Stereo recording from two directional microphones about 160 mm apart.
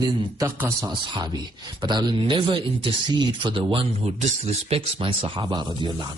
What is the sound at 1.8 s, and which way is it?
A man's voice, 30° right (ahead or behind).